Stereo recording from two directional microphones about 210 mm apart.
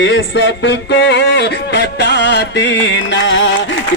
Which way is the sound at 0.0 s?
60° left (ahead or behind).